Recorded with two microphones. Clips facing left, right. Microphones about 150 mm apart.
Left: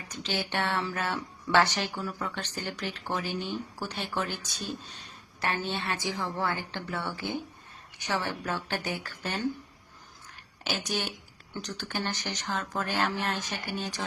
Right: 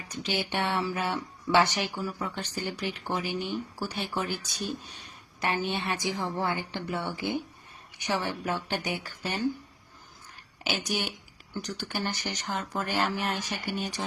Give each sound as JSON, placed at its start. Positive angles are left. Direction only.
{"t": 0.1, "sound": "speech", "side_deg": -15}
{"t": 10.6, "sound": "speech", "side_deg": -10}